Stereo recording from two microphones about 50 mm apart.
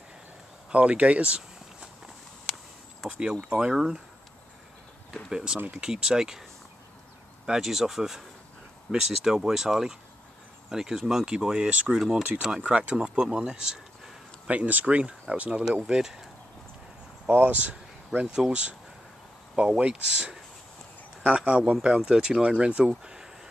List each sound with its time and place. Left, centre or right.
0.7 s speech: right
3.1 s speech: centre
3.7 s speech: centre
5.3 s speech: centre
7.4 s speech: centre
12.6 s speech: right
14.5 s speech: right
15.6 s speech: centre
17.3 s speech: right
18.2 s speech: centre
18.5 s speech: right